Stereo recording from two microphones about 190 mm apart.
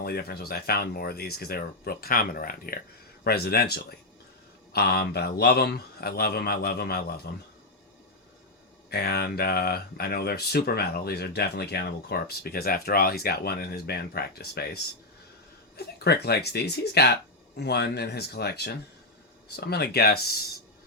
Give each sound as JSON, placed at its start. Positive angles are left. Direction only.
{"t": 0.0, "sound": "speech", "side_deg": 55}
{"t": 8.9, "sound": "speech", "side_deg": 55}